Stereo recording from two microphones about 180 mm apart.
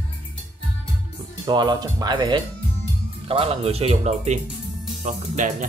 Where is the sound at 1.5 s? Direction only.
25° right (ahead or behind).